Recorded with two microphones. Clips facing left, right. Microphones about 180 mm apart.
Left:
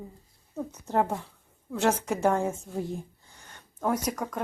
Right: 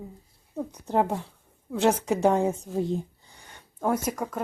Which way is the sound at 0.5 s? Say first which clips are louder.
Right 2 dB; 15° right (ahead or behind).